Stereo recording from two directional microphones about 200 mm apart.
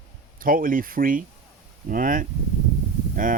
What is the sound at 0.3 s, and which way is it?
Speech, 45° right (ahead or behind).